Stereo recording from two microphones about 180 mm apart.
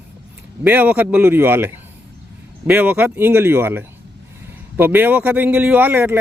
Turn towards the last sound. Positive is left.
turn(degrees=-10)  # may be behind; listen again after turning